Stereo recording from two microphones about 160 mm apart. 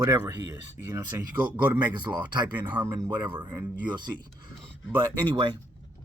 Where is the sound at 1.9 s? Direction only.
30° right (ahead or behind).